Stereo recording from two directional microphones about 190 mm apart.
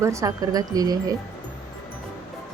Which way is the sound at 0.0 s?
15° right (ahead or behind).